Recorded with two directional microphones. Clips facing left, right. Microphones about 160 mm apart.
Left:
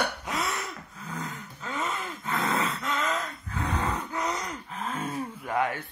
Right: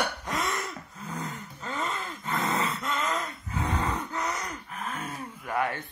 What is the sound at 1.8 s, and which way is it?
Gasp, 10° left (ahead or behind).